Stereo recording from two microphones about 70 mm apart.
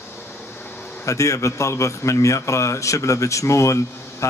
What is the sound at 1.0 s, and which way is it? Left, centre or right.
A man's voice, left.